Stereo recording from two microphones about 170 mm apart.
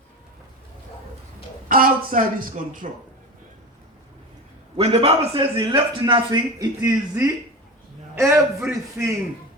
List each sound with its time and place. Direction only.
1.6 s speech: 55° right (ahead or behind)
4.8 s a man's voice: 35° right (ahead or behind); by 9.1 s 15° right (ahead or behind)